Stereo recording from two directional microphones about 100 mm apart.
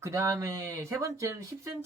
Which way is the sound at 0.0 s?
30° right (ahead or behind).